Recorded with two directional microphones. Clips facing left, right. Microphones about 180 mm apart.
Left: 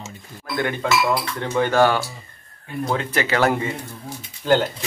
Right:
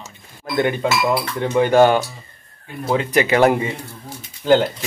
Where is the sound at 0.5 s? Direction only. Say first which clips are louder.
Right 3 dB; 20° right (ahead or behind).